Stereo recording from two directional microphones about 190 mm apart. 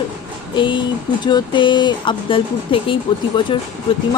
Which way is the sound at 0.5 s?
25° left (ahead or behind).